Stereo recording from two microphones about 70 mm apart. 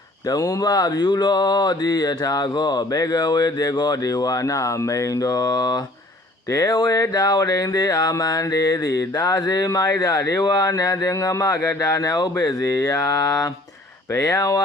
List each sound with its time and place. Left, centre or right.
0.3 s mantra: left
6.5 s mantra: left
11.0 s speech: left
11.8 s mantra: left